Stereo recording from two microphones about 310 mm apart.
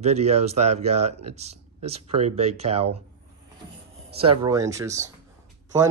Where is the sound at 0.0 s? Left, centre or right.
Right.